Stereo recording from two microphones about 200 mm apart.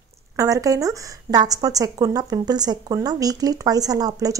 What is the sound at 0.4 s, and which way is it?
Speech, 15° right (ahead or behind).